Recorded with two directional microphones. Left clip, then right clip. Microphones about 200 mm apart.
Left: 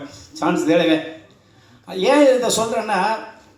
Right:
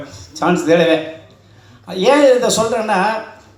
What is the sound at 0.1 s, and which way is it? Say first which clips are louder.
A man's voice: right 4 dB; 25° right (ahead or behind).